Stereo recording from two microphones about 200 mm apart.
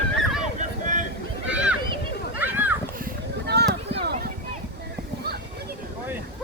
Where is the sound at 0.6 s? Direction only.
40° right (ahead or behind).